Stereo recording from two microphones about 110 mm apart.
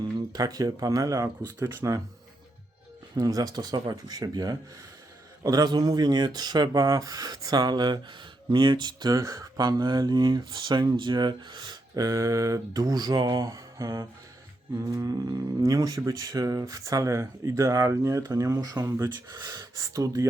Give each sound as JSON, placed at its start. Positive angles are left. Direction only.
{"t": 0.3, "sound": "speech", "side_deg": -35}
{"t": 3.2, "sound": "speech", "side_deg": -35}